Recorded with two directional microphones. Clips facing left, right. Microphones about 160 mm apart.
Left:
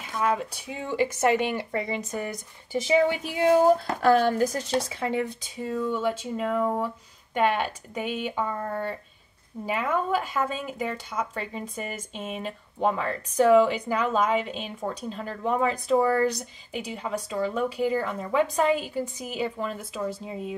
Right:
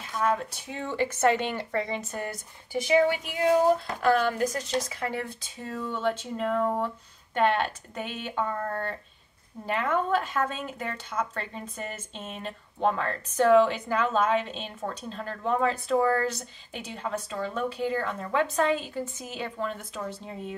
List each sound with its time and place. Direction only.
0.2 s speech: 10° left (ahead or behind)
4.0 s speech: 35° left (ahead or behind)
5.1 s speech: 15° left (ahead or behind)